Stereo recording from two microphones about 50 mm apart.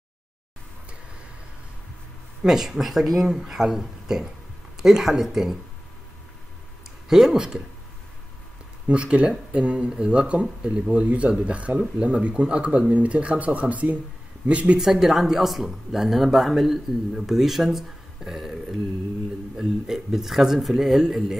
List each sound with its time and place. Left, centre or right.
2.4 s speech: centre
7.1 s speech: centre
8.8 s speech: right
14.8 s speech: centre